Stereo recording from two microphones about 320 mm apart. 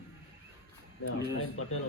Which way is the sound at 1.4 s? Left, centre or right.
Left.